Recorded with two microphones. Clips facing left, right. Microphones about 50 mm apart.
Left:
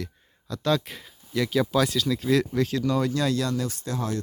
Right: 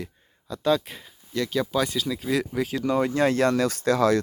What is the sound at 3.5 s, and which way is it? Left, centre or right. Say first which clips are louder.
Speech: right 7 dB; right.